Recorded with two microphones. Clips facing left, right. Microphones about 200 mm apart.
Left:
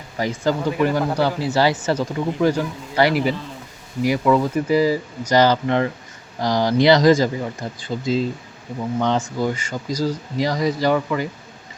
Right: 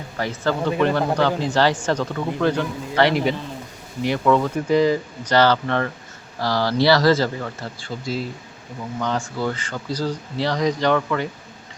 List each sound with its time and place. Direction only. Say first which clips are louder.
0.2 s speech: left 2 dB; 10° left (ahead or behind)